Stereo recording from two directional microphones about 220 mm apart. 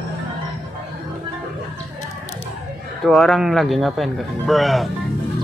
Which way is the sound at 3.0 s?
Centre (ahead or behind).